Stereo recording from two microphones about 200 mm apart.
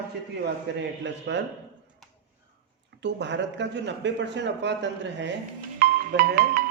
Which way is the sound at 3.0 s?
60° right (ahead or behind).